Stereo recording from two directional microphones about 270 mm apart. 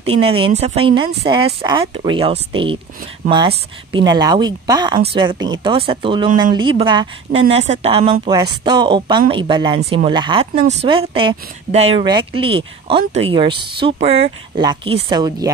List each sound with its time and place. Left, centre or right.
0.0 s a woman's voice: right